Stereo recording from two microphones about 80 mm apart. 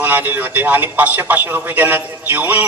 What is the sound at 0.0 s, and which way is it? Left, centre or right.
A man's voice, right.